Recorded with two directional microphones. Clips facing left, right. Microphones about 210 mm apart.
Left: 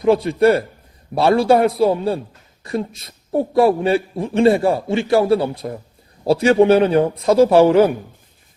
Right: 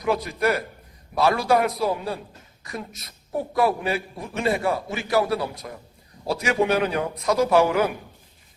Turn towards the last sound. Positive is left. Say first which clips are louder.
# left 8 dB
turn(degrees=30)  # may be behind; listen again after turning